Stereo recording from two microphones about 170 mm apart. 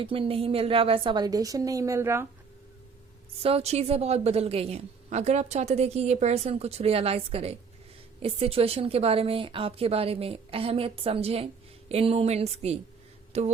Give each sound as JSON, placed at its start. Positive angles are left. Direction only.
{"t": 0.0, "sound": "a woman's voice", "side_deg": -30}
{"t": 3.4, "sound": "a woman's voice", "side_deg": -35}